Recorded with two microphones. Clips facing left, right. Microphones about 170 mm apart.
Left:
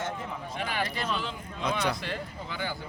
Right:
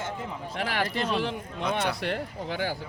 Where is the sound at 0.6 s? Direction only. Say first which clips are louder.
Right 3 dB; 80° right.